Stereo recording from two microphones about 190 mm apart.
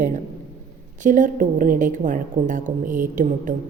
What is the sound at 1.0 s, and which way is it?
A woman's voice, 45° right (ahead or behind).